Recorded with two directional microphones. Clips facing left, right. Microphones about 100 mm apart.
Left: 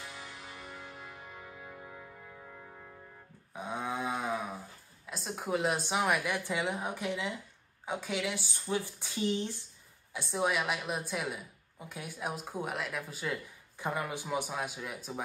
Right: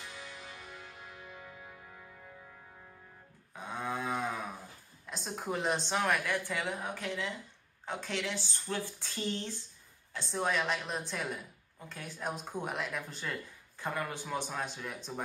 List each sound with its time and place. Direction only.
0.1 s music: 10° left (ahead or behind)
3.5 s cattle: 15° left (ahead or behind)
5.0 s a woman's voice: 5° left (ahead or behind)